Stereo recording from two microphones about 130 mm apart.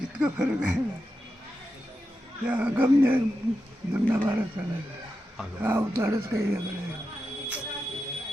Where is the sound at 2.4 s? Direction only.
10° right (ahead or behind).